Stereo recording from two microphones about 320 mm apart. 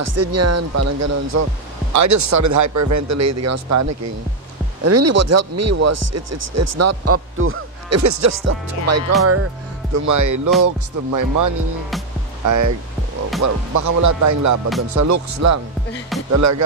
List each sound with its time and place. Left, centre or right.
0.0 s a man's voice: right
8.0 s a man's voice: right
10.6 s music: right
12.4 s a man's voice: right